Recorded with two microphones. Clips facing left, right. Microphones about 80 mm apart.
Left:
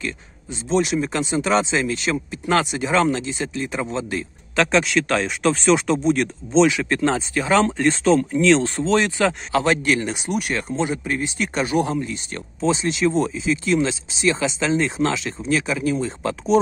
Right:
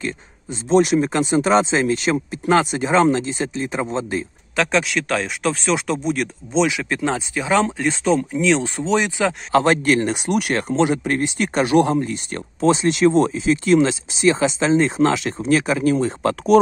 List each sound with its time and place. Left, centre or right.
0.0 s speech: right
4.6 s speech: centre
9.7 s speech: right
16.2 s speech: right